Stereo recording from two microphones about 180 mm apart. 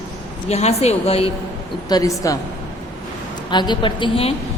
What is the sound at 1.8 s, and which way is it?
Speech, 20° left (ahead or behind).